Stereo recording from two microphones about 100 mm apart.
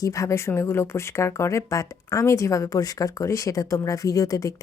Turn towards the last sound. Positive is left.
turn(degrees=35)  # may be behind; listen again after turning